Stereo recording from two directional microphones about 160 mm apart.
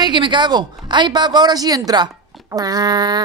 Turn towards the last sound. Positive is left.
turn(degrees=-25)  # may be behind; listen again after turning